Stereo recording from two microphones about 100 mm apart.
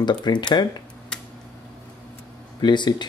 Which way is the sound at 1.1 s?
5° left (ahead or behind).